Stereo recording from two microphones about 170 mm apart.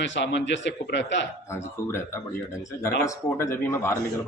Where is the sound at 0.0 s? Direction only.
90° left.